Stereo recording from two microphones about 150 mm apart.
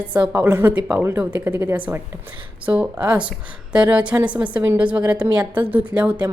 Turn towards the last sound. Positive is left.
turn(degrees=-10)  # may be behind; listen again after turning